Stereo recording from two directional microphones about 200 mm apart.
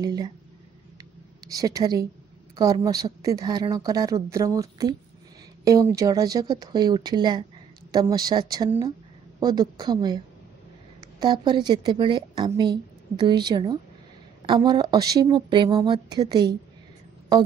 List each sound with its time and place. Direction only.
0.0 s a woman's voice: 20° right (ahead or behind)
1.5 s a woman's voice: 15° right (ahead or behind)